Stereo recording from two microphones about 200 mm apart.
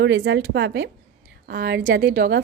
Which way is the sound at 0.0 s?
60° right (ahead or behind).